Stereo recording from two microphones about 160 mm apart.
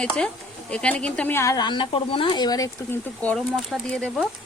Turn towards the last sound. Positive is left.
turn(degrees=5)  # may be behind; listen again after turning